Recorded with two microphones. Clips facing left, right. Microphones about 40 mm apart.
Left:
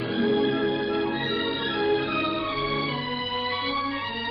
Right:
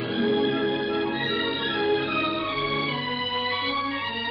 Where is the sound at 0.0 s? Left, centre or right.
Centre.